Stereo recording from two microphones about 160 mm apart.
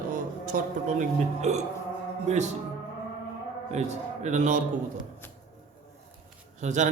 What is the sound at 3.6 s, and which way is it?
Speech, 45° right (ahead or behind).